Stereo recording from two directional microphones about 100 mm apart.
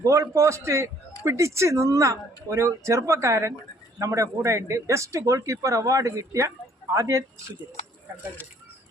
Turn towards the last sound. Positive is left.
turn(degrees=-30)  # may be behind; listen again after turning